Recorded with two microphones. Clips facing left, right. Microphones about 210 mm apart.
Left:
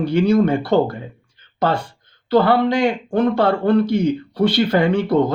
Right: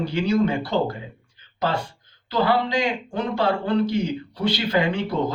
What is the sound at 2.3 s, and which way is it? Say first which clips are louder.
Speech: left 6 dB; 55° left (ahead or behind).